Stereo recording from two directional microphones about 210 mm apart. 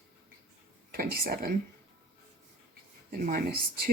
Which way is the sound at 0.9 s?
45° right (ahead or behind).